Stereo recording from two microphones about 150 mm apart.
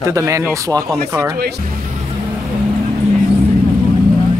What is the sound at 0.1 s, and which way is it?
Speech, 20° right (ahead or behind).